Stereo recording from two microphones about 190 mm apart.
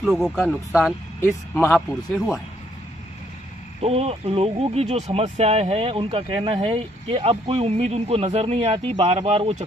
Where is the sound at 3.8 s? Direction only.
30° right (ahead or behind).